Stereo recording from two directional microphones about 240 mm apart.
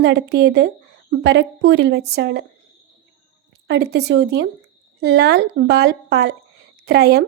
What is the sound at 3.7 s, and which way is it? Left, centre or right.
Speech, right.